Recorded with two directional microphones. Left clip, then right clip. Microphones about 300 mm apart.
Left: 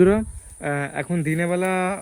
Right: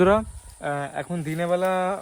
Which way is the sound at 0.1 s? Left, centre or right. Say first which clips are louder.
Right 1 dB; left.